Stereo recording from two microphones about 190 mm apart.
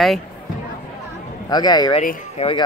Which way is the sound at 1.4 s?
20° left (ahead or behind).